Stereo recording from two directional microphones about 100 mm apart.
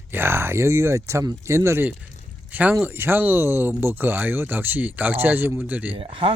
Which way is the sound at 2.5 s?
15° right (ahead or behind).